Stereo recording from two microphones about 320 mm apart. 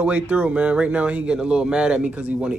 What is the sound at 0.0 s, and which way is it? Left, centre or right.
Speech, centre.